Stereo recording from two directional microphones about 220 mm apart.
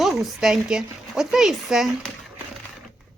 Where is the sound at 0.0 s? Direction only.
Centre (ahead or behind).